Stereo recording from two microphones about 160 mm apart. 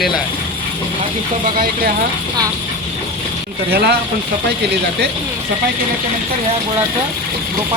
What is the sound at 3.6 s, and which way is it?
Speech, 75° right (ahead or behind).